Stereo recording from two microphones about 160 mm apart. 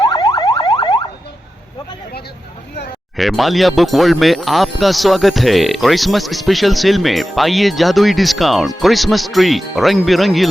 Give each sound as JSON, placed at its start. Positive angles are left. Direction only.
{"t": 0.0, "sound": "car alarm", "side_deg": 25}
{"t": 3.2, "sound": "speech", "side_deg": 0}